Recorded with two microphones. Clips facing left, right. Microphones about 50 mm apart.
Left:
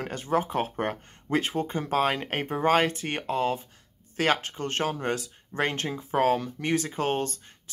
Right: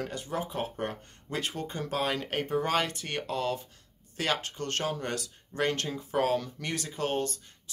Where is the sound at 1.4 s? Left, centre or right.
Left.